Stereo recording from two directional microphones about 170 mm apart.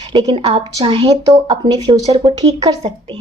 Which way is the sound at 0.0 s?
25° right (ahead or behind).